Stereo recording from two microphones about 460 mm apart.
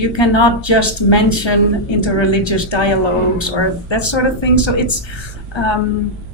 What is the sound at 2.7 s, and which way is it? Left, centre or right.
Speech, left.